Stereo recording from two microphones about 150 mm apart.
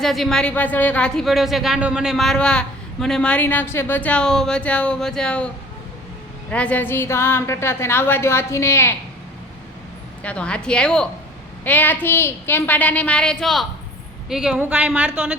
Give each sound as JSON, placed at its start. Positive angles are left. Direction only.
{"t": 0.0, "sound": "speech", "side_deg": 0}
{"t": 6.5, "sound": "a woman's voice", "side_deg": 10}
{"t": 10.2, "sound": "a woman's voice", "side_deg": 5}